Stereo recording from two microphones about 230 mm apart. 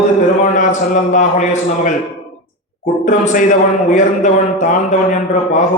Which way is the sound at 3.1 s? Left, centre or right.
Left.